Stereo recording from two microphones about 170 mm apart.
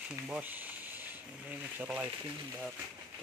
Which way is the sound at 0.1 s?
10° right (ahead or behind).